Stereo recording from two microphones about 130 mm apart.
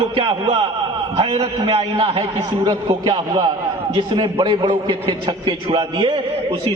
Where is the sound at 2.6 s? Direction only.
35° right (ahead or behind).